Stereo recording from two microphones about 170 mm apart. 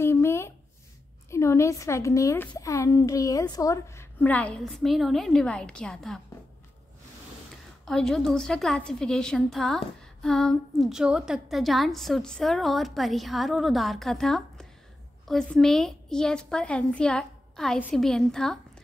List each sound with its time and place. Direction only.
0.0 s a sound: 15° left (ahead or behind)
1.3 s a woman's voice: 15° left (ahead or behind)
7.8 s a woman's voice: 5° left (ahead or behind)